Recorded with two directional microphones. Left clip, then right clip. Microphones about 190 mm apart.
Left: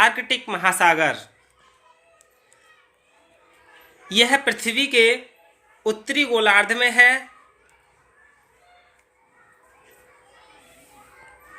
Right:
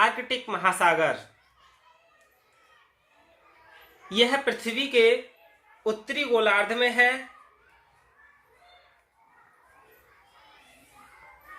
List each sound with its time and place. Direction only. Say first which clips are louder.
0.0 s speech: left 6 dB; 50° left (ahead or behind)
4.1 s speech: left 5 dB; 55° left (ahead or behind)